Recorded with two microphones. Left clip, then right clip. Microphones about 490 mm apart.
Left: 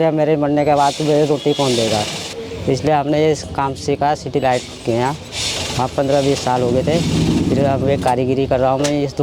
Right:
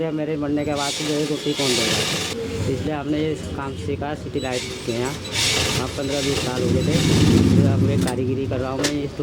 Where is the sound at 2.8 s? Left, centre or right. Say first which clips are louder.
Left 12 dB; left.